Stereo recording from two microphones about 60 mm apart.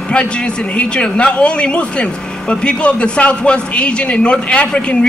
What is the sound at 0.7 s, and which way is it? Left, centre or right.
A man's voice, centre.